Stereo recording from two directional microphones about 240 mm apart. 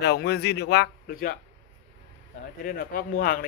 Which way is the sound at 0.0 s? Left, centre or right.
Left.